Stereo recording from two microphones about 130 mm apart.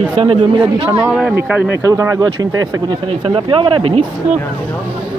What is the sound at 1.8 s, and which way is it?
Speech, 25° right (ahead or behind).